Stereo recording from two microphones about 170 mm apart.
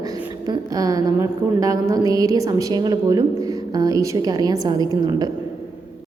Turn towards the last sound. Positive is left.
turn(degrees=-25)  # may be behind; listen again after turning